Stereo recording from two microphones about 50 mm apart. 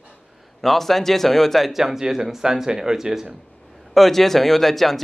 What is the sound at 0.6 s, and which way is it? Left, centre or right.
Speech, centre.